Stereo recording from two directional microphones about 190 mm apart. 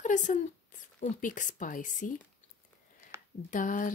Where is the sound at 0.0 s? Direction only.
40° left (ahead or behind).